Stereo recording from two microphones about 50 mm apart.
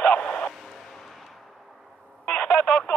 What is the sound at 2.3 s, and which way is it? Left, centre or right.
Telephone dialing, left.